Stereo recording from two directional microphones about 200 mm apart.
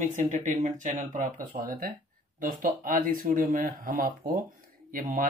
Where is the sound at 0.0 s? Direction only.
35° right (ahead or behind).